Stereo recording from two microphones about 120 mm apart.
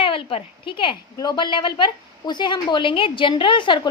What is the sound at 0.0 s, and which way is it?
A woman's voice, 50° left (ahead or behind).